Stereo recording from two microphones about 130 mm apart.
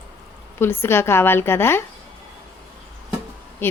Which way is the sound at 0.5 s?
20° left (ahead or behind).